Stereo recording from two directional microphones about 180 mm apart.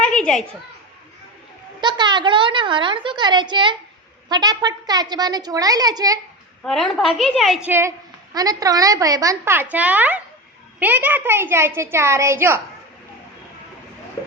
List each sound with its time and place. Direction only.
0.0 s a sound: 5° left (ahead or behind)
1.8 s a woman's voice: 25° right (ahead or behind)
6.6 s a woman's voice: 5° left (ahead or behind)
7.7 s a woman's voice: 15° right (ahead or behind)